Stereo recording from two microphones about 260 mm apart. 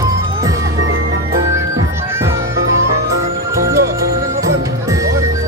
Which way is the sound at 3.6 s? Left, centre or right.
Centre.